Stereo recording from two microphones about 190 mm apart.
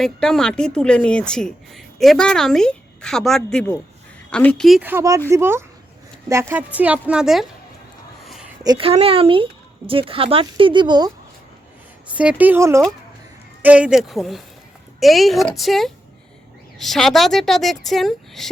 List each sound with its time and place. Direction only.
0.0 s a woman's voice: 5° left (ahead or behind)
4.9 s a woman's voice: 15° right (ahead or behind)
8.2 s a sound: centre (ahead or behind)
8.6 s speech: 25° right (ahead or behind)
12.0 s a woman's voice: 5° right (ahead or behind)